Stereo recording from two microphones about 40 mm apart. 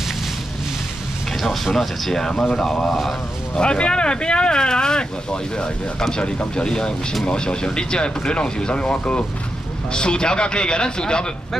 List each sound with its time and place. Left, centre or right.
1.4 s speech: centre
3.5 s speech: left
9.9 s speech: left